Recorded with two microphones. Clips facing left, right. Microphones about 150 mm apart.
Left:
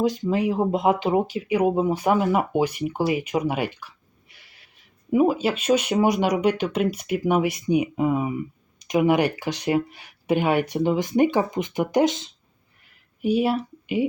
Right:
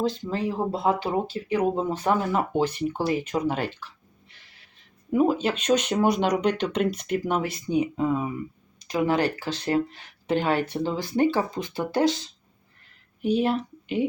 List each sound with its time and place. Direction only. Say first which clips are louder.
0.0 s speech: left 4 dB; 15° left (ahead or behind)
13.2 s speech: left 2 dB; 10° left (ahead or behind)